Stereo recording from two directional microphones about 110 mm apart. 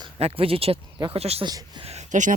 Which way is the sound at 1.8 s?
75° right (ahead or behind).